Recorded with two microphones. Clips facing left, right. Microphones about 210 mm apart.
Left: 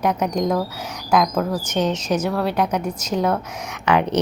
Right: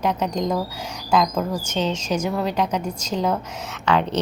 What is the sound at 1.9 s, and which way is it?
A woman's voice, 10° right (ahead or behind).